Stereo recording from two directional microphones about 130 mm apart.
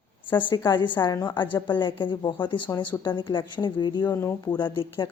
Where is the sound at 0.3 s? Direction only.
40° left (ahead or behind).